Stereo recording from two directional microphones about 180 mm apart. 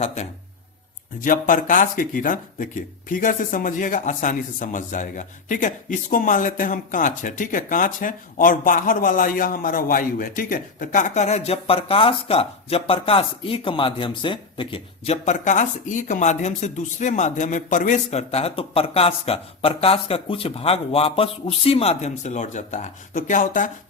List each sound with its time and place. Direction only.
1.2 s speech: 50° left (ahead or behind)